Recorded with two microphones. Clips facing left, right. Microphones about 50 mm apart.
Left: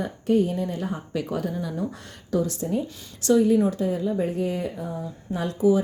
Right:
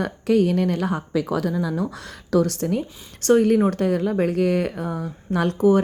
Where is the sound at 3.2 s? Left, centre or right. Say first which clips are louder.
Right 2 dB; right.